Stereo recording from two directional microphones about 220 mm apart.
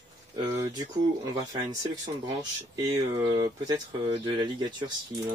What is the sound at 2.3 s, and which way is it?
Speech, 20° right (ahead or behind).